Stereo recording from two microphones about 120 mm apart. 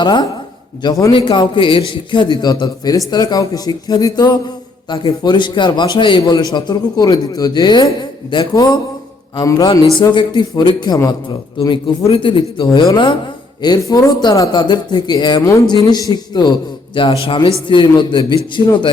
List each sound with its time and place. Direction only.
0.0 s a man's voice: 40° left (ahead or behind)
11.7 s a man's voice: 50° left (ahead or behind)
15.4 s speech: 25° left (ahead or behind)
15.6 s a man's voice: 35° left (ahead or behind)